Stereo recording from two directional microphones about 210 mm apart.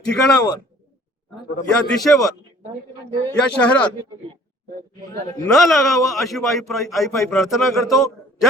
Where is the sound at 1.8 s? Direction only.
Centre (ahead or behind).